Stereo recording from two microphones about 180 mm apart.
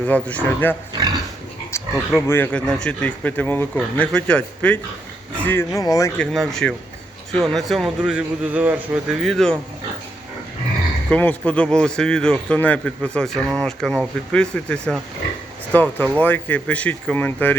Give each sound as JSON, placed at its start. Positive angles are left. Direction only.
{"t": 0.1, "sound": "speech", "side_deg": 10}
{"t": 6.1, "sound": "speech", "side_deg": 0}
{"t": 11.1, "sound": "speech", "side_deg": 10}